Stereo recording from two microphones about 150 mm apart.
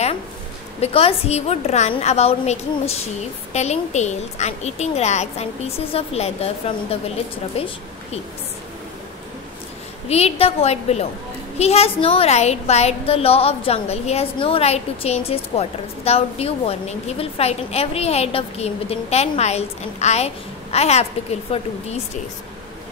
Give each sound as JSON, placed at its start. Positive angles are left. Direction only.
{"t": 0.7, "sound": "a woman's voice", "side_deg": 40}
{"t": 10.0, "sound": "a woman's voice", "side_deg": 45}